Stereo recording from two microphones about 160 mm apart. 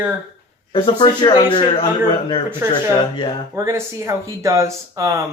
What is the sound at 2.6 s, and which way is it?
Speech, 15° right (ahead or behind).